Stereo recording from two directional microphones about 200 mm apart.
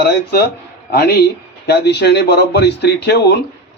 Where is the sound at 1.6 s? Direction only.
55° left (ahead or behind).